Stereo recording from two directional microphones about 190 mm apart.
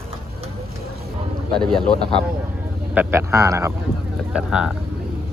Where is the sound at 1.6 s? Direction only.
5° left (ahead or behind).